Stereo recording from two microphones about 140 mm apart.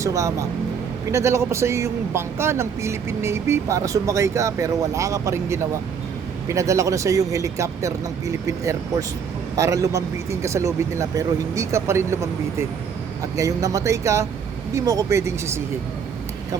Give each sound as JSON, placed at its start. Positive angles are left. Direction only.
{"t": 0.0, "sound": "speech", "side_deg": -20}